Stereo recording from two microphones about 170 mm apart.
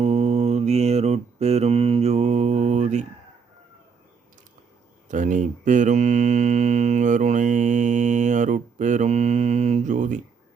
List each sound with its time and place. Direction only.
0.0 s mantra: 40° right (ahead or behind)
5.0 s mantra: 50° right (ahead or behind)